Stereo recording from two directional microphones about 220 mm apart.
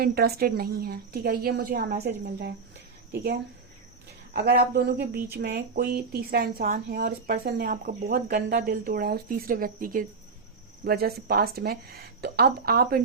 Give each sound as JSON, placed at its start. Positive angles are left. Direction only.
{"t": 0.0, "sound": "speech", "side_deg": -45}
{"t": 4.4, "sound": "speech", "side_deg": -45}